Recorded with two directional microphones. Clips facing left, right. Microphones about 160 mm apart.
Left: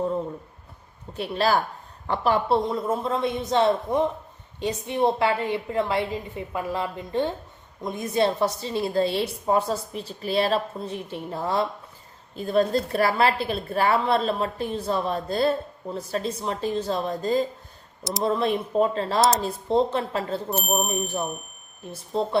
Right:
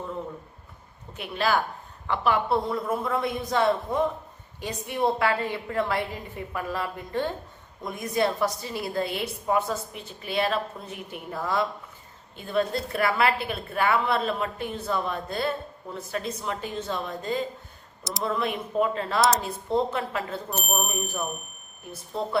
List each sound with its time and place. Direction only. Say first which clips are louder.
1.1 s a woman's voice: left 3 dB; 35° left (ahead or behind)